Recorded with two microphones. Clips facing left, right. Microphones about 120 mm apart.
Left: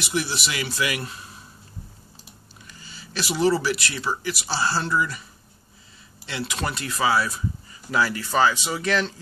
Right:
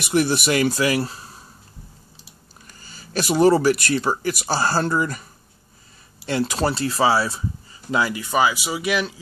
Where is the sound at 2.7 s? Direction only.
45° right (ahead or behind).